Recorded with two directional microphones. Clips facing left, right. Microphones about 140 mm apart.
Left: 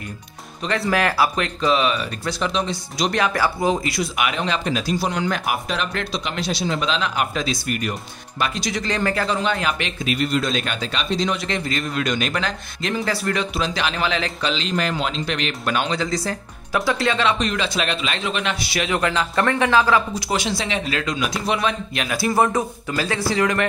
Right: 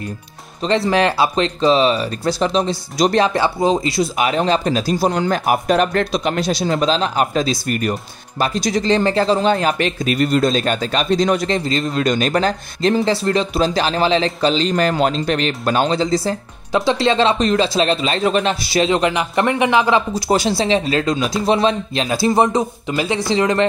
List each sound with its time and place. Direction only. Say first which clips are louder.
0.6 s speech: right 5 dB; 25° right (ahead or behind)
8.8 s speech: right 7 dB; 30° right (ahead or behind)
18.9 s a man's voice: right 4 dB; 20° right (ahead or behind)
20.2 s a man's voice: right 7 dB; 35° right (ahead or behind)